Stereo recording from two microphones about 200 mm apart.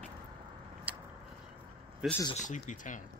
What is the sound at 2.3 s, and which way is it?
Speech, 35° left (ahead or behind).